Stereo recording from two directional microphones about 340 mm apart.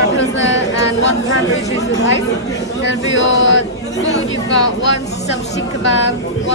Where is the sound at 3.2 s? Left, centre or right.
Left.